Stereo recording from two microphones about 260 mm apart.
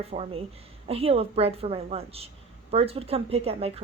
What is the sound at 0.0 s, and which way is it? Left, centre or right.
A woman's voice, right.